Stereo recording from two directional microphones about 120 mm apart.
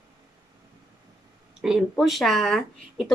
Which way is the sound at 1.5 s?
5° right (ahead or behind).